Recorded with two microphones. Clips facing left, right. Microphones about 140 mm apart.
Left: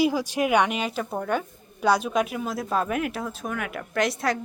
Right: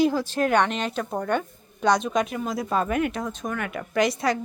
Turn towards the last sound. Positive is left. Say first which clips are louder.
# right 2 dB
turn(degrees=0)  # may be behind; listen again after turning